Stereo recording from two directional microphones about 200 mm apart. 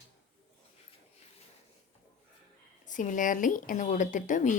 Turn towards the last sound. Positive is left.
turn(degrees=40)  # may be behind; listen again after turning